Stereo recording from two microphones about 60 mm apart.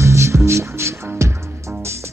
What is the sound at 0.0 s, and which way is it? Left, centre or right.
Music, right.